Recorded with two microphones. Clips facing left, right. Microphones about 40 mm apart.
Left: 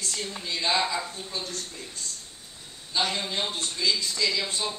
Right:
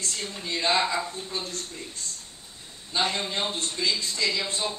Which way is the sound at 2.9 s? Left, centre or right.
Right.